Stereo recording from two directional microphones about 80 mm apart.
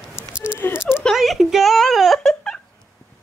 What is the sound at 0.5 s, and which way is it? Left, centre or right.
Speech, left.